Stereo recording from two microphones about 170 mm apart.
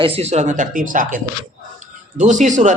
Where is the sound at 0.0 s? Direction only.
35° right (ahead or behind).